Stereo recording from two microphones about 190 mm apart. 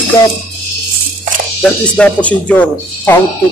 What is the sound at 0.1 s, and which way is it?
Speech, 15° left (ahead or behind).